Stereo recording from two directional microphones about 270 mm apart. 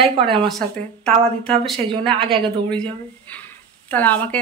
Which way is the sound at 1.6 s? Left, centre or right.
Centre.